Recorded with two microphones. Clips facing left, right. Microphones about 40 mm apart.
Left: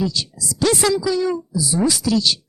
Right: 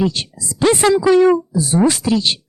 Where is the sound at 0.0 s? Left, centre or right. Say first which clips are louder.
Right 4 dB; right.